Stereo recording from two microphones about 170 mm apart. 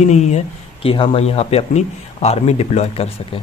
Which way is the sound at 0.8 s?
30° left (ahead or behind).